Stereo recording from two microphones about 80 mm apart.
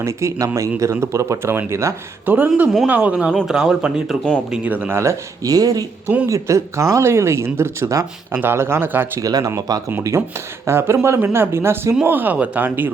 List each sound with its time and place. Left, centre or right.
0.0 s speech: right
2.2 s speech: right; by 4.2 s centre
4.5 s speech: centre
4.9 s speech: right
5.5 s speech: right
6.2 s speech: right
9.2 s speech: right
10.0 s speech: right